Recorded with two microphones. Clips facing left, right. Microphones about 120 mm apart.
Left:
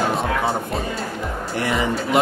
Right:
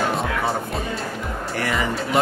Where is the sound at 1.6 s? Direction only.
20° left (ahead or behind).